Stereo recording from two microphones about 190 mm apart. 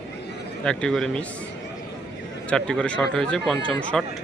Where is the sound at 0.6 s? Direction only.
5° left (ahead or behind).